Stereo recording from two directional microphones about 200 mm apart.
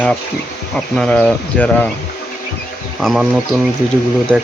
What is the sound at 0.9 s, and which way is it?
Speech, 5° left (ahead or behind).